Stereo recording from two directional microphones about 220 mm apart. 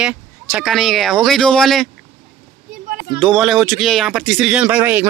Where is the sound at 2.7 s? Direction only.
40° right (ahead or behind).